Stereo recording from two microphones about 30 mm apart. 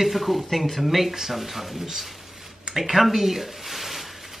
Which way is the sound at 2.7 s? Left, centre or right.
Centre.